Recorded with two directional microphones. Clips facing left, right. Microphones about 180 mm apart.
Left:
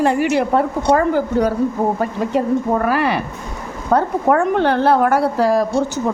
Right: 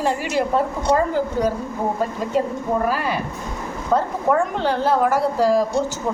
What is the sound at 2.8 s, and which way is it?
A woman's voice, 70° left (ahead or behind).